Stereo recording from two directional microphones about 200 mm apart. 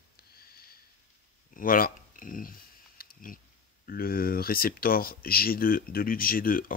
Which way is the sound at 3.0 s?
45° left (ahead or behind).